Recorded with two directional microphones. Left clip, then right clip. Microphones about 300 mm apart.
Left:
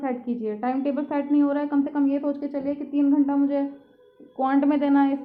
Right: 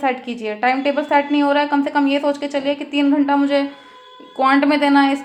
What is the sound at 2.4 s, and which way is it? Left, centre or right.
A woman's voice, right.